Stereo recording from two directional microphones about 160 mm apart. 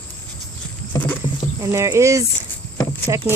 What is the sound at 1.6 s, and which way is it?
Speech, 20° right (ahead or behind).